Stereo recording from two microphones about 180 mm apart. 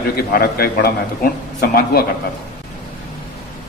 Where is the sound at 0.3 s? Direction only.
55° left (ahead or behind).